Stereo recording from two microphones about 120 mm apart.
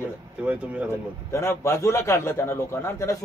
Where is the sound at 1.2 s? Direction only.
20° left (ahead or behind).